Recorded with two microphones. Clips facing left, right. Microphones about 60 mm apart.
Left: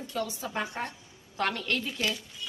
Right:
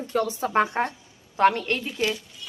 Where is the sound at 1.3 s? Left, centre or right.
Right.